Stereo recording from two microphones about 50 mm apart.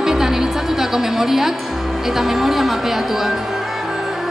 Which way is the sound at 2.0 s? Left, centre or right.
Centre.